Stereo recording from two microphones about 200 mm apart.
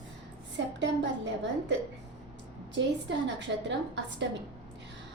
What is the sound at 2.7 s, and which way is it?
A woman's voice, 65° right (ahead or behind).